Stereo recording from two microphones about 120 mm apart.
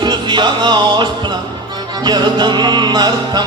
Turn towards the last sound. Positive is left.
turn(degrees=-35)  # may be behind; listen again after turning